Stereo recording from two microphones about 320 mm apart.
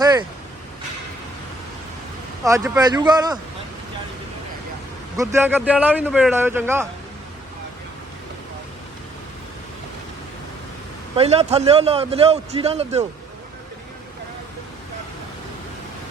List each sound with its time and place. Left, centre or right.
0.0 s vehicle: centre
2.4 s speech: centre
5.1 s speech: centre
11.2 s a man's voice: centre